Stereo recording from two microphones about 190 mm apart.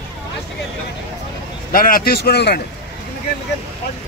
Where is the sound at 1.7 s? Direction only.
50° left (ahead or behind).